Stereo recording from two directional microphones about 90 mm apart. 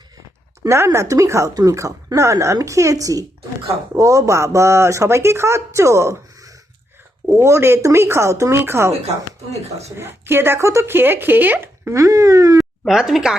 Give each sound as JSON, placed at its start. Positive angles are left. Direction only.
{"t": 0.9, "sound": "speech", "side_deg": -40}
{"t": 10.0, "sound": "speech", "side_deg": -25}
{"t": 11.9, "sound": "speech", "side_deg": -35}
{"t": 12.8, "sound": "speech", "side_deg": -5}